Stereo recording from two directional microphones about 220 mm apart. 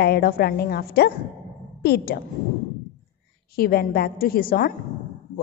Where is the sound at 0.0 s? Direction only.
45° left (ahead or behind).